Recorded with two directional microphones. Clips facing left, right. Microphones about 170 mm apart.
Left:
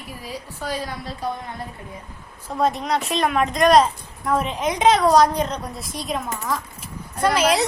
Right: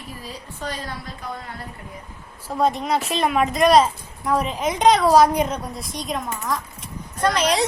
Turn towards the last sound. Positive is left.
turn(degrees=5)  # may be behind; listen again after turning